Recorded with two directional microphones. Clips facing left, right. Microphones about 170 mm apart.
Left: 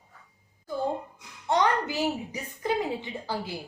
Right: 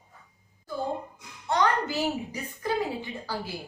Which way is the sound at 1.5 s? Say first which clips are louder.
Left 1 dB; 15° left (ahead or behind).